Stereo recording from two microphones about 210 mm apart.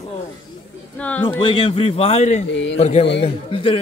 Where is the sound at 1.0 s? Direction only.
10° left (ahead or behind).